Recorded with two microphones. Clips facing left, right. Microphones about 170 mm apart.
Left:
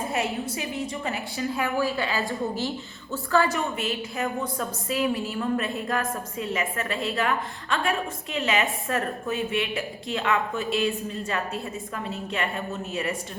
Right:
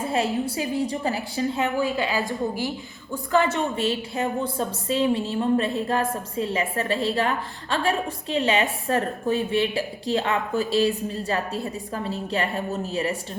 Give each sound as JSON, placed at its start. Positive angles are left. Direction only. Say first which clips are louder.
{"t": 0.1, "sound": "a woman's voice", "louder": "right 4 dB", "side_deg": -30}